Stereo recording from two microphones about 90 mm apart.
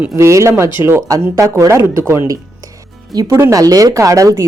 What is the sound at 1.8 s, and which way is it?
Speech, 30° right (ahead or behind).